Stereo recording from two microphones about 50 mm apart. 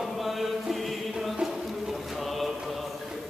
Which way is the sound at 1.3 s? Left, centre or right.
Centre.